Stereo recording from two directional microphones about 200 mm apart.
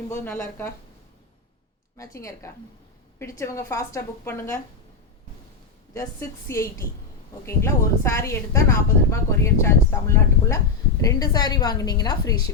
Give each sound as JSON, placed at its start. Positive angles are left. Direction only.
{"t": 0.1, "sound": "a woman's voice", "side_deg": 10}
{"t": 2.0, "sound": "a woman's voice", "side_deg": 15}
{"t": 5.9, "sound": "a woman's voice", "side_deg": 15}